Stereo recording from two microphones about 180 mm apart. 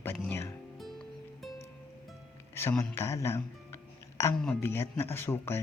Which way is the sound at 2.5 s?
15° left (ahead or behind).